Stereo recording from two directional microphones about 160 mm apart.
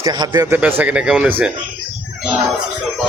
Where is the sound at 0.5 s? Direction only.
10° right (ahead or behind).